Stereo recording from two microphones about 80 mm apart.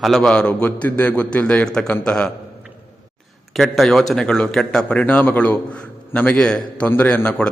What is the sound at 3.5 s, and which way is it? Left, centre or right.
A man's voice, centre.